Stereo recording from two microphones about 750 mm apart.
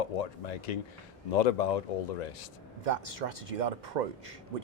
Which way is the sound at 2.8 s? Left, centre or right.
Right.